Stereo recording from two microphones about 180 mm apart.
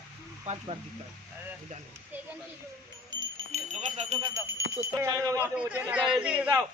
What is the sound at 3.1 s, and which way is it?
Jingle bell, 20° right (ahead or behind).